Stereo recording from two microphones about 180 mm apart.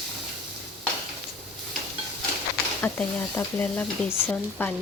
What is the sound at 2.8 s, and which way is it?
A woman's voice, 10° left (ahead or behind).